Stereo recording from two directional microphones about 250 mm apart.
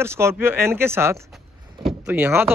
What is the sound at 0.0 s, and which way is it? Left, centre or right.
A man's voice, centre.